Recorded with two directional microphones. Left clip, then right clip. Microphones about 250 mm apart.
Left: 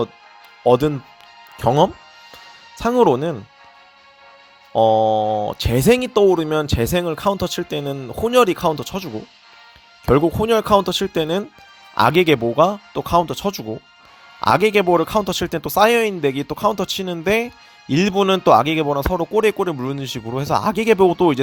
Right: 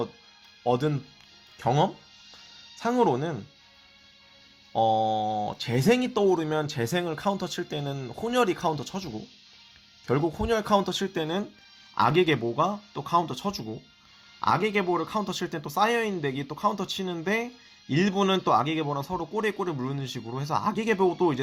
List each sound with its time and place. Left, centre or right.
0.6 s speech: left
4.7 s speech: left
10.1 s speech: left